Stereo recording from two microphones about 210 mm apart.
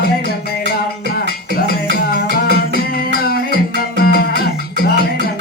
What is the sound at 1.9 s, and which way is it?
Music, 45° left (ahead or behind).